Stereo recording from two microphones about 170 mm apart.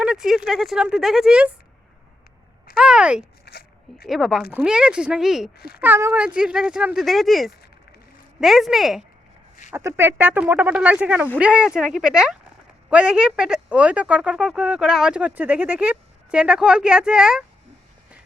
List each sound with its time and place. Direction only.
0.0 s speech: 5° right (ahead or behind)
2.7 s speech: 5° right (ahead or behind)
3.5 s speech: 80° left
3.9 s speech: centre (ahead or behind)
5.5 s speech: 65° left (ahead or behind)
5.8 s speech: 10° right (ahead or behind)
9.7 s speech: 15° right (ahead or behind)